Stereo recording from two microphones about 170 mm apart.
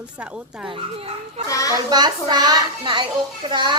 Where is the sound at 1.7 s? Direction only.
25° right (ahead or behind).